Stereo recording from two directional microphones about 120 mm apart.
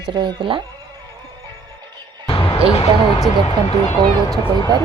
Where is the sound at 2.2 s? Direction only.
45° left (ahead or behind).